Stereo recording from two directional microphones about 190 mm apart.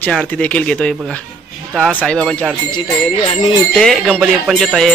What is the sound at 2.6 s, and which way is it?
Speech, 30° left (ahead or behind).